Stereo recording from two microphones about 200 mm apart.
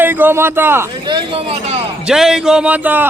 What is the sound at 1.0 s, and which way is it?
Speech, 25° right (ahead or behind).